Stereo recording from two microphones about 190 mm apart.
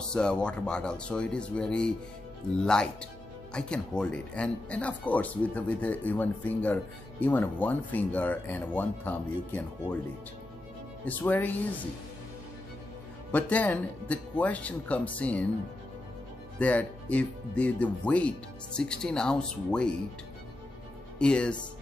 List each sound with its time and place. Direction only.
0.1 s speech: 5° left (ahead or behind)
11.1 s speech: 10° left (ahead or behind)
13.3 s speech: 10° left (ahead or behind)
16.5 s speech: 5° left (ahead or behind)
21.2 s speech: 5° left (ahead or behind)